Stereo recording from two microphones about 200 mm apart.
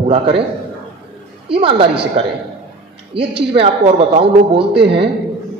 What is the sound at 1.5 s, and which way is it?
A woman's voice, 25° right (ahead or behind).